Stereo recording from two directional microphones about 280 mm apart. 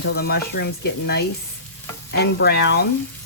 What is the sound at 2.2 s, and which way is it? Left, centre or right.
Speech, left.